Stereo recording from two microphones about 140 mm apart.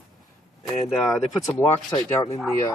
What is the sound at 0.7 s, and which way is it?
Speech, centre (ahead or behind).